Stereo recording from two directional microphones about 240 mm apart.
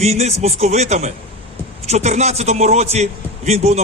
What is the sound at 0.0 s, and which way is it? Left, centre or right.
A man's voice, right.